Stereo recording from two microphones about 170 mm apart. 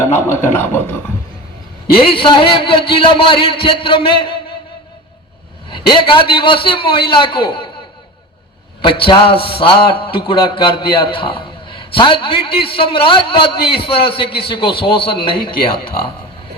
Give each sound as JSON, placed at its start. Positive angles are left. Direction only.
{"t": 0.3, "sound": "a man's voice", "side_deg": 15}
{"t": 1.9, "sound": "a man's voice", "side_deg": 30}
{"t": 5.7, "sound": "a man's voice", "side_deg": 30}
{"t": 8.8, "sound": "a man's voice", "side_deg": 30}